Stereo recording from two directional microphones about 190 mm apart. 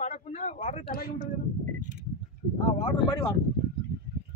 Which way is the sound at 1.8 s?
45° right (ahead or behind).